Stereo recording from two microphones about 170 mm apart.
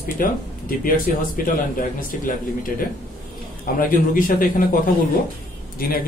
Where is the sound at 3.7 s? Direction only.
55° left (ahead or behind).